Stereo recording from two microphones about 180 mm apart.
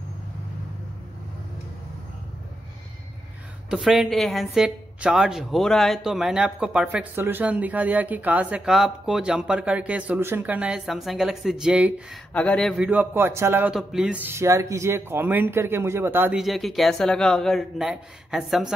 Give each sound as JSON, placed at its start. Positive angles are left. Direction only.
{"t": 3.7, "sound": "a woman's voice", "side_deg": 0}
{"t": 16.3, "sound": "a woman's voice", "side_deg": 0}